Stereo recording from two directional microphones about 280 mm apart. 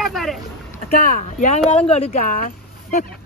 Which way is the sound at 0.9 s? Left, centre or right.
Left.